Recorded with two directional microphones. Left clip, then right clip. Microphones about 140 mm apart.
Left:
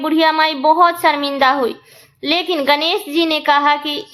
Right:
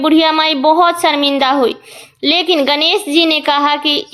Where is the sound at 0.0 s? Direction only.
40° right (ahead or behind).